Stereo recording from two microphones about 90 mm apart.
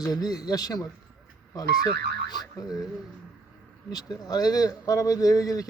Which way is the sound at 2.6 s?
45° left (ahead or behind).